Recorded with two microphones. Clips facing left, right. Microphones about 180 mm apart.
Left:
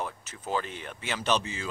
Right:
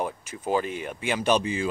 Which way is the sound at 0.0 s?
10° right (ahead or behind).